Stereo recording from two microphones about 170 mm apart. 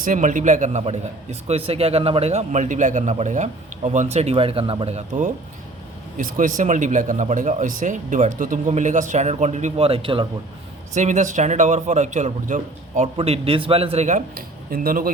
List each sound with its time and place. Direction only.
0.0 s a man's voice: 50° right (ahead or behind); by 10.2 s 30° right (ahead or behind)
10.9 s a man's voice: 45° right (ahead or behind)
14.3 s speech: 60° right (ahead or behind)